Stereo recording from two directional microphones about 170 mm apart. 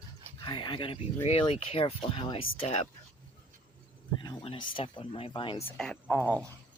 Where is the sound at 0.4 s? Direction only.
25° left (ahead or behind).